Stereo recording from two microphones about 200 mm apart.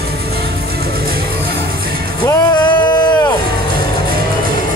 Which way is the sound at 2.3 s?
20° left (ahead or behind).